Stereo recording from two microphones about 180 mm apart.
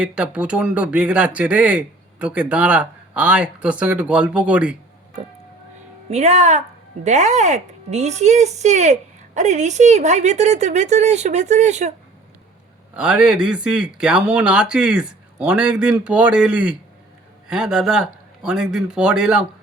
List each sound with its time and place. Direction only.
0.0 s speech: 5° right (ahead or behind)
6.1 s speech: 40° right (ahead or behind)
13.0 s speech: 5° right (ahead or behind)